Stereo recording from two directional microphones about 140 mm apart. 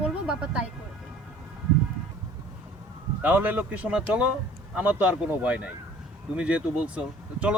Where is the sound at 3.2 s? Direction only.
10° right (ahead or behind).